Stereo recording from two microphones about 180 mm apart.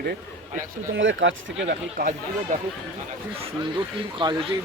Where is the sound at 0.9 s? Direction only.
90° right.